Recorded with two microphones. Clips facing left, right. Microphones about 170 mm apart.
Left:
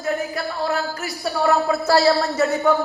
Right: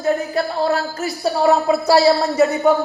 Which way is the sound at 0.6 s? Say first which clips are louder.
Right 4 dB; 35° right (ahead or behind).